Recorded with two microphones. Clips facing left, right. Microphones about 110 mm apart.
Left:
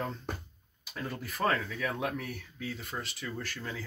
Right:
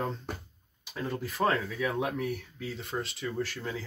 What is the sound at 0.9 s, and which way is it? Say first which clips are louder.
Speech: right 4 dB; 25° right (ahead or behind).